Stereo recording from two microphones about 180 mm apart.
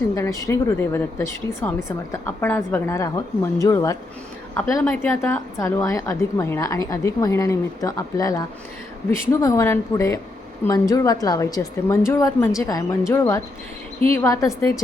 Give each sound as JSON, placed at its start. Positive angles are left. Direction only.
{"t": 0.2, "sound": "a woman's voice", "side_deg": 15}